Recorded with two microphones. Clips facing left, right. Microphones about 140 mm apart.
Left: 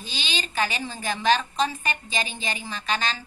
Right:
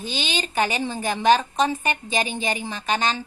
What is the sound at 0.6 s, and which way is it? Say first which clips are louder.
A woman's voice: right 4 dB; 25° right (ahead or behind).